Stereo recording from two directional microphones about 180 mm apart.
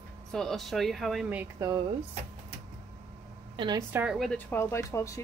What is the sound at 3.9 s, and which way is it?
Speech, 5° right (ahead or behind).